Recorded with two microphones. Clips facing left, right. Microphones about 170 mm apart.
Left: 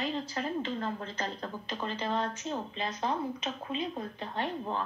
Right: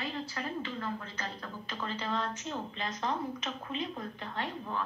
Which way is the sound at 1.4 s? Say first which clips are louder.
Left 3 dB; 20° left (ahead or behind).